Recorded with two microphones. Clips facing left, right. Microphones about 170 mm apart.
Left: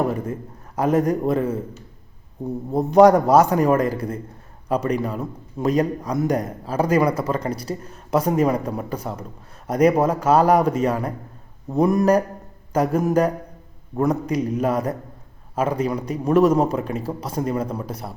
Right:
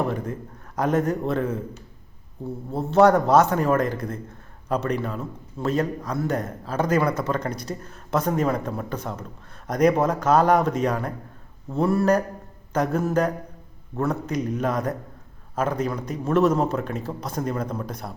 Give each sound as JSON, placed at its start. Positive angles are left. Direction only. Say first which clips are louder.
{"t": 0.8, "sound": "a man's voice", "louder": "left 3 dB", "side_deg": 10}